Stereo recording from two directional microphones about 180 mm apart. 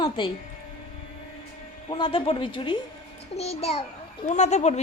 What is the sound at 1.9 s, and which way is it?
Speech, 30° left (ahead or behind).